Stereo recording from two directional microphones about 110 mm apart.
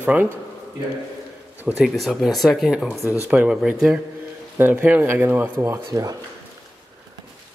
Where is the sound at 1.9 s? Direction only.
Centre (ahead or behind).